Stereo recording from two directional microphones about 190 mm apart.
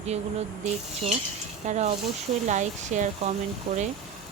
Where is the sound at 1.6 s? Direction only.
35° right (ahead or behind).